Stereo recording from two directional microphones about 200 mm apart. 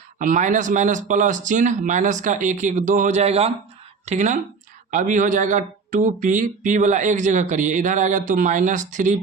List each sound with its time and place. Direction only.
0.2 s speech: 40° right (ahead or behind)